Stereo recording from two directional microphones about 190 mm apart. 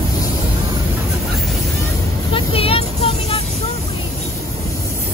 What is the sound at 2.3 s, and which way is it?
Vehicle, 30° left (ahead or behind).